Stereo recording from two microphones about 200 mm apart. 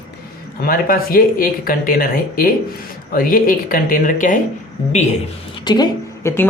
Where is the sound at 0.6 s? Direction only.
45° left (ahead or behind).